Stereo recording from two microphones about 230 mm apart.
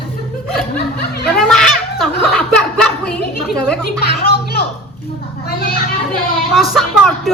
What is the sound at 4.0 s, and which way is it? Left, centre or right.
Music, left.